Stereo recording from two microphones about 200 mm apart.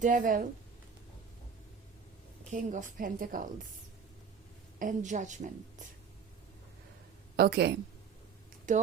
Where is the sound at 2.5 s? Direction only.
40° right (ahead or behind).